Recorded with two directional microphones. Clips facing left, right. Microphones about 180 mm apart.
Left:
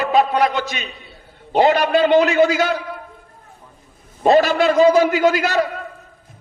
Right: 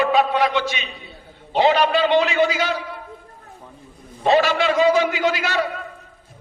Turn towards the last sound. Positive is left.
turn(degrees=40)  # may be behind; listen again after turning